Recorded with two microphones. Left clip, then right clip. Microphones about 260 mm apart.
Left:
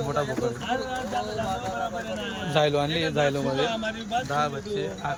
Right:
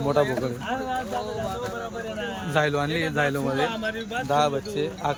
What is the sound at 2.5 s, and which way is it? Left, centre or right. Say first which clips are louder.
A man's voice: left 1 dB; centre.